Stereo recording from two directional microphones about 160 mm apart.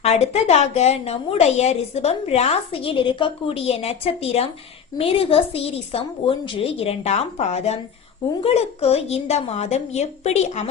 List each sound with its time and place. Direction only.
0.0 s a woman's voice: 45° left (ahead or behind)